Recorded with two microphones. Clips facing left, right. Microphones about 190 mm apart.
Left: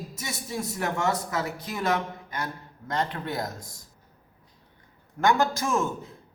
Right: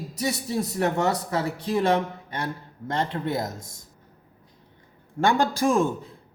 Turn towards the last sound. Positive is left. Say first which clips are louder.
# right 3 dB
turn(degrees=-30)  # may be behind; listen again after turning